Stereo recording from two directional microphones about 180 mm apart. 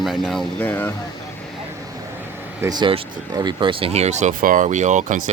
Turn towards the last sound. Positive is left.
turn(degrees=-45)  # may be behind; listen again after turning